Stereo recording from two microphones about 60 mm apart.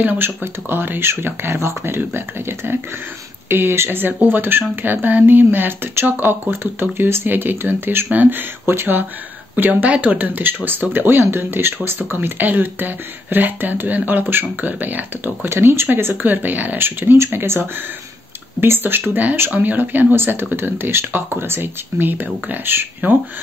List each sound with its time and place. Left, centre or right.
0.0 s speech: right
15.5 s speech: right
15.9 s speech: right